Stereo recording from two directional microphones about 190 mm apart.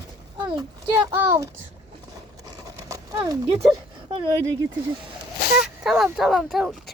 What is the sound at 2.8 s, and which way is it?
Horse, 20° right (ahead or behind).